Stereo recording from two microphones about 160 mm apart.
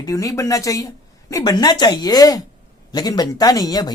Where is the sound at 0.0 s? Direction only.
20° left (ahead or behind).